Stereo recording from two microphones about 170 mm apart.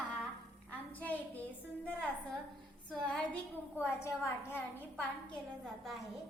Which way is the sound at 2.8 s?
5° left (ahead or behind).